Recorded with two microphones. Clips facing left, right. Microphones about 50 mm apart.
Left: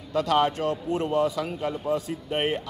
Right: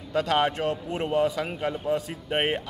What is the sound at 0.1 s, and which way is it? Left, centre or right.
Speech, right.